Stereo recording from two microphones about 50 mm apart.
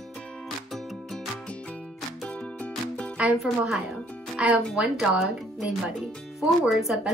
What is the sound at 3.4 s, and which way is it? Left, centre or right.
Speech, centre.